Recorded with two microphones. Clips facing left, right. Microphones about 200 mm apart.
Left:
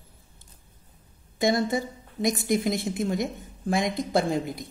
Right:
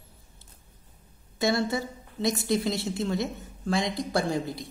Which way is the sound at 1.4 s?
15° left (ahead or behind).